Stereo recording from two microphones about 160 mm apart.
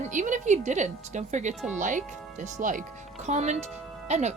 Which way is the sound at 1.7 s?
50° right (ahead or behind).